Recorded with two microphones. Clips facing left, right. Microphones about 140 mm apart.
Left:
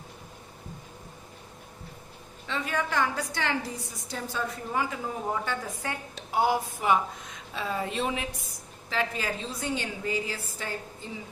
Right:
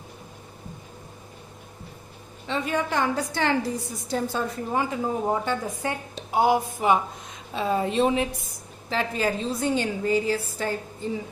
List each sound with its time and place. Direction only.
2.5 s a woman's voice: 25° right (ahead or behind)